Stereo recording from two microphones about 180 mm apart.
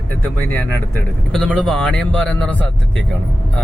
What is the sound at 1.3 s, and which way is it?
A man's voice, centre (ahead or behind).